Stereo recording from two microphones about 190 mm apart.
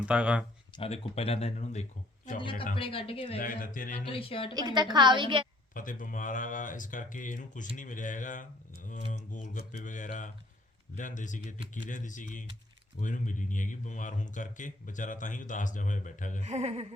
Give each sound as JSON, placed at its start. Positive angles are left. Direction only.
{"t": 0.0, "sound": "speech", "side_deg": -5}
{"t": 0.8, "sound": "speech", "side_deg": 35}
{"t": 2.7, "sound": "a woman's voice", "side_deg": 30}
{"t": 3.4, "sound": "speech", "side_deg": 45}
{"t": 4.0, "sound": "a woman's voice", "side_deg": 30}
{"t": 4.5, "sound": "a woman's voice", "side_deg": -25}
{"t": 5.7, "sound": "speech", "side_deg": 45}
{"t": 16.4, "sound": "a sound", "side_deg": -35}